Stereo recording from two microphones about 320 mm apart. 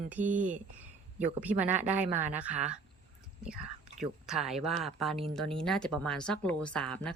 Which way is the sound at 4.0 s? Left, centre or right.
Centre.